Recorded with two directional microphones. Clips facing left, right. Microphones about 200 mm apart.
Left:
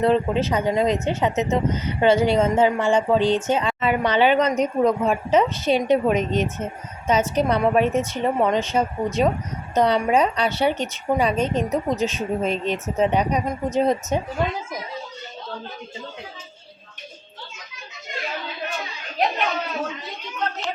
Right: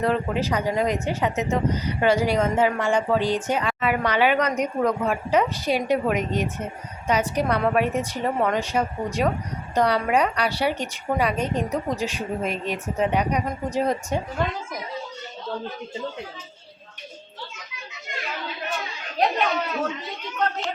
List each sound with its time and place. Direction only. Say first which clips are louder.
0.0 s speech: left 4 dB; 25° left (ahead or behind)